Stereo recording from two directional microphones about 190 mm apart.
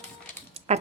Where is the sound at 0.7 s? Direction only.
35° right (ahead or behind).